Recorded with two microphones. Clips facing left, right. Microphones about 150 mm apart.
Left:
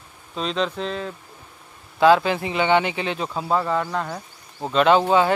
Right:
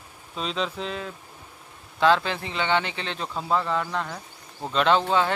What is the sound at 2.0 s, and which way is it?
Speech, 10° left (ahead or behind).